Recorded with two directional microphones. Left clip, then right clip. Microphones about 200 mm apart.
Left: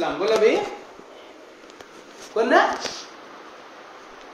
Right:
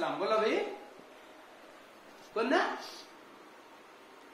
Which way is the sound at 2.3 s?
20° right (ahead or behind).